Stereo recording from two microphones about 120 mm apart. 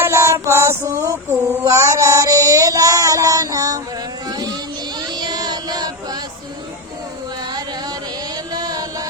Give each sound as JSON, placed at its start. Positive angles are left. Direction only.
{"t": 0.0, "sound": "child singing", "side_deg": -25}
{"t": 4.3, "sound": "a sound", "side_deg": -35}
{"t": 4.9, "sound": "child singing", "side_deg": -35}
{"t": 8.5, "sound": "music", "side_deg": -35}